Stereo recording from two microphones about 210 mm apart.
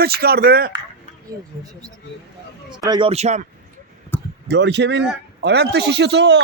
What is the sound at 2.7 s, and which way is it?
Speech, 20° right (ahead or behind).